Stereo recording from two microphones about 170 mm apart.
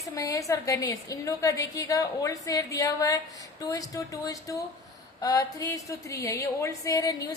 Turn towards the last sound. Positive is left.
turn(degrees=20)  # may be behind; listen again after turning